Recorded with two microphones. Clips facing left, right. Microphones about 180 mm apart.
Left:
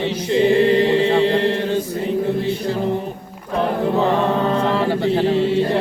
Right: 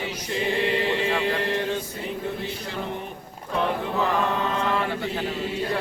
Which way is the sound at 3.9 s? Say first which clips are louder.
Left 6 dB; 30° left (ahead or behind).